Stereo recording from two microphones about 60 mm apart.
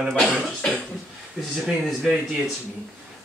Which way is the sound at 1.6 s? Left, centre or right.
Centre.